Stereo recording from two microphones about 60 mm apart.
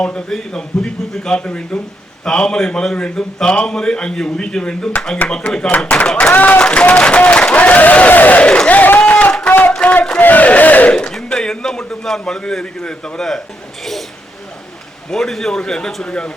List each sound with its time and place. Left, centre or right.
0.3 s a man's voice: centre
1.5 s crowd: left
2.2 s a man's voice: centre
5.7 s crowd: left
6.1 s a man's voice: centre
6.3 s crowd: left
6.6 s speech: centre
9.5 s a sound: left
9.7 s battle cry: left
10.2 s crowd: left
10.9 s a man's voice: centre
15.1 s a man's voice: centre